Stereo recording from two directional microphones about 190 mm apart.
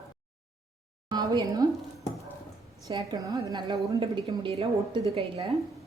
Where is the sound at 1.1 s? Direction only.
20° right (ahead or behind).